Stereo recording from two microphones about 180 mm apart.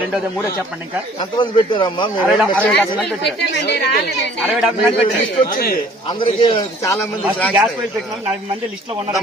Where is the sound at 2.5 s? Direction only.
5° left (ahead or behind).